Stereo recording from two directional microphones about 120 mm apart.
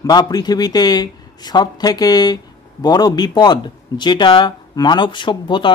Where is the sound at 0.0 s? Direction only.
35° left (ahead or behind).